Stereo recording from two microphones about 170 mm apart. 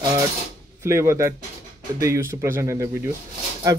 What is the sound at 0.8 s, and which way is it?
Speech, 15° right (ahead or behind).